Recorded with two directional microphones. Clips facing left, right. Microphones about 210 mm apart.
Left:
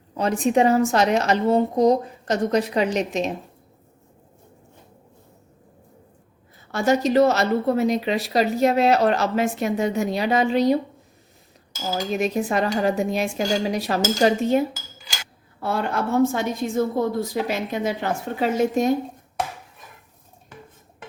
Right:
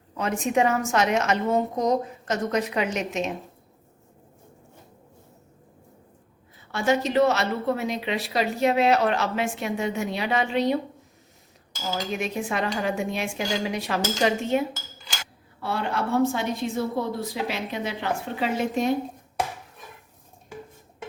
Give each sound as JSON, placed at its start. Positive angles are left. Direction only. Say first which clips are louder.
{"t": 0.1, "sound": "a woman's voice", "louder": "left 5 dB", "side_deg": 35}
{"t": 6.7, "sound": "a woman's voice", "louder": "left 4 dB", "side_deg": 40}
{"t": 12.2, "sound": "a woman's voice", "louder": "left 7 dB", "side_deg": 40}
{"t": 15.6, "sound": "a woman's voice", "louder": "left 3 dB", "side_deg": 45}